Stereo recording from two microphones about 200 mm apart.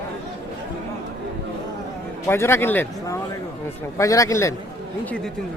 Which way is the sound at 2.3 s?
10° left (ahead or behind).